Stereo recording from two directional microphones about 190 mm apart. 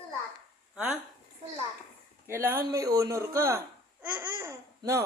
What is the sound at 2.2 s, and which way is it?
A man's voice, 10° right (ahead or behind).